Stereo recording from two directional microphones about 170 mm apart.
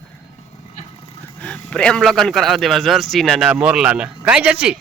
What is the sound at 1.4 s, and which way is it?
A man's voice, 5° left (ahead or behind).